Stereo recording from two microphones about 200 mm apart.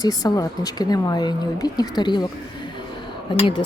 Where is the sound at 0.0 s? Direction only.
20° left (ahead or behind).